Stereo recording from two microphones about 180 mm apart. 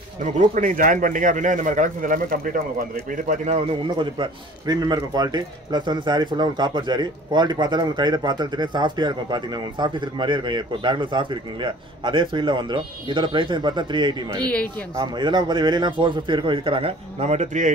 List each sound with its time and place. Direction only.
0.2 s a man's voice: 45° right (ahead or behind)